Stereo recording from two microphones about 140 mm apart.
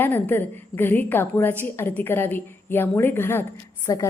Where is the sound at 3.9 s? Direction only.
25° left (ahead or behind).